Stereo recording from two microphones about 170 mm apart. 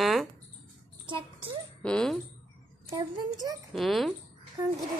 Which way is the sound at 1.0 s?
30° right (ahead or behind).